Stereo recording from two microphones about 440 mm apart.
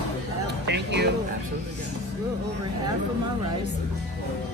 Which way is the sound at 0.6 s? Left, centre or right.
Right.